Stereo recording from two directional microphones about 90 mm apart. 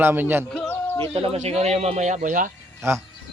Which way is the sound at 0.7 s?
25° left (ahead or behind).